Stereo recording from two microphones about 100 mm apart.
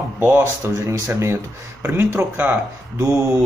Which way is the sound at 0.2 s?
25° right (ahead or behind).